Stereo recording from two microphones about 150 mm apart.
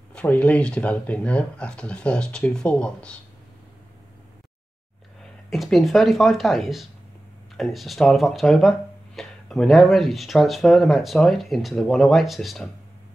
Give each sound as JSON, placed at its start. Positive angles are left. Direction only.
{"t": 0.1, "sound": "speech", "side_deg": 10}
{"t": 5.5, "sound": "speech", "side_deg": 0}